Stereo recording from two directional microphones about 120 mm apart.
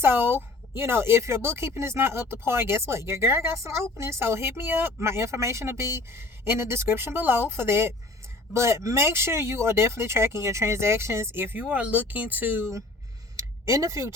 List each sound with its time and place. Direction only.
0.0 s speech: 20° right (ahead or behind)
13.7 s speech: 25° right (ahead or behind)